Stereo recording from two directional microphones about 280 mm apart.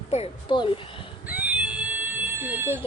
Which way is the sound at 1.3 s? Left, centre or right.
Centre.